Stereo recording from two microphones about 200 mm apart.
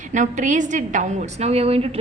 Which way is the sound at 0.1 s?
40° right (ahead or behind).